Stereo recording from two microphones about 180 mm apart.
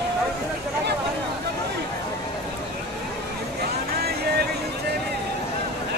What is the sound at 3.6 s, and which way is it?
Vehicle, 60° right (ahead or behind).